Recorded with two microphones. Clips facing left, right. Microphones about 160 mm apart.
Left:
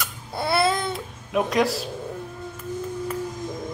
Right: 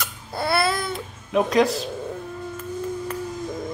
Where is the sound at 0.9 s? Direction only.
Centre (ahead or behind).